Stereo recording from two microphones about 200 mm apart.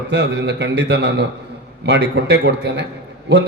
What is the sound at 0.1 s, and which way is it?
A man's voice, 60° right (ahead or behind).